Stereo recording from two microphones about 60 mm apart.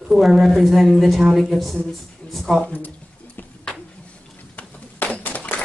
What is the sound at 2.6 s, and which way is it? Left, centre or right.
Speech, left.